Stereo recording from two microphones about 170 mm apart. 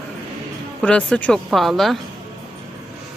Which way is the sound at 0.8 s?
5° left (ahead or behind).